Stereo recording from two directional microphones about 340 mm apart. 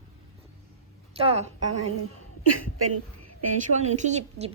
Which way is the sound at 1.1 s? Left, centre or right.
Centre.